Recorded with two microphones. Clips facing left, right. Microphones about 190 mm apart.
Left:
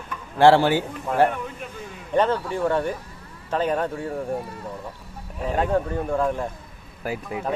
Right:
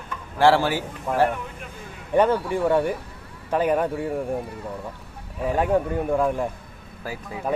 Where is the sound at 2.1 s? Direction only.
15° right (ahead or behind).